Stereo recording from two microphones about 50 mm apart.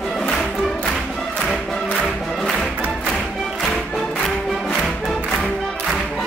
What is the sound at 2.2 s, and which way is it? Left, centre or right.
Music, centre.